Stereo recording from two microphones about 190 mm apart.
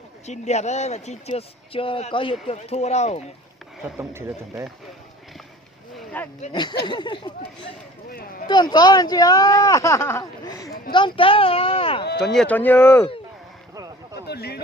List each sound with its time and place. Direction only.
0.3 s speech: 35° left (ahead or behind)
3.9 s speech: 10° right (ahead or behind)
6.2 s speech: 10° left (ahead or behind)
6.5 s speech: 25° left (ahead or behind)
8.4 s speech: 20° left (ahead or behind)
12.2 s speech: 5° left (ahead or behind)
14.3 s speech: 55° left (ahead or behind)